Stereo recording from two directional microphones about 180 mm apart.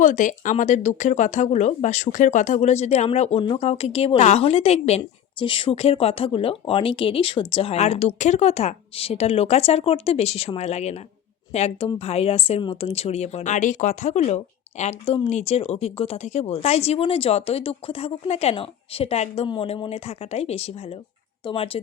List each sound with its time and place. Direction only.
0.0 s speech: 45° left (ahead or behind)